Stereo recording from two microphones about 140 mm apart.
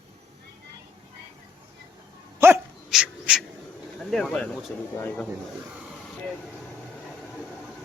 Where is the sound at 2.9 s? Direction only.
5° right (ahead or behind).